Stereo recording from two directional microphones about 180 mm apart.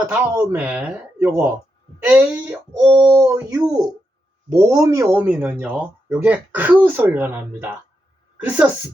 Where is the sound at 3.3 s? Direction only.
20° right (ahead or behind).